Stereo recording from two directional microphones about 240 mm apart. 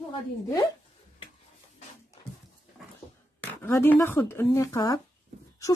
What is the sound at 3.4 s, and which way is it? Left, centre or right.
Speech, centre.